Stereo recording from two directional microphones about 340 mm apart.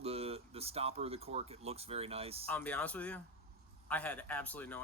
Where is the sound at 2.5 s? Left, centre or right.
Centre.